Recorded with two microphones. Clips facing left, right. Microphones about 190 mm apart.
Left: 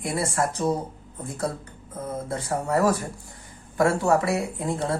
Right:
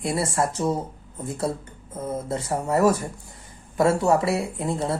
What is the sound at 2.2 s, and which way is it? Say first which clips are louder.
Speech: even; 25° right (ahead or behind).